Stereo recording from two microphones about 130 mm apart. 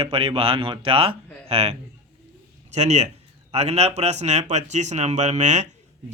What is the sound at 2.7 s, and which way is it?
Speech, 60° right (ahead or behind).